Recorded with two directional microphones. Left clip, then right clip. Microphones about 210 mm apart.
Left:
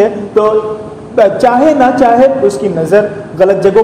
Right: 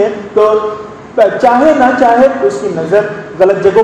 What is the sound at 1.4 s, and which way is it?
A man's voice, 30° left (ahead or behind).